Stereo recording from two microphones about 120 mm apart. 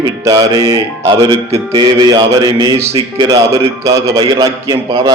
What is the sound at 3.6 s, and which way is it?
Speech, 25° right (ahead or behind).